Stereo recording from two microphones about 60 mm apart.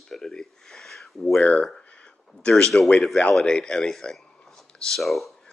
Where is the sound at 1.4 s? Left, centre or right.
Left.